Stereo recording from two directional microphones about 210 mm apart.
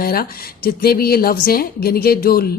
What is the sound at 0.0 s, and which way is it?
A woman's voice, 45° left (ahead or behind).